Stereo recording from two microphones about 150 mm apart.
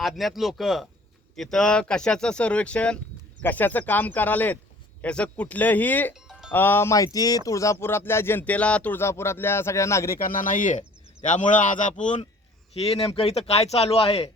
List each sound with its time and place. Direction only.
0.0 s speech: centre (ahead or behind)
6.1 s music: 5° right (ahead or behind)
6.5 s speech: 15° left (ahead or behind)
10.2 s a man's voice: 65° left (ahead or behind)
12.7 s a man's voice: 40° left (ahead or behind)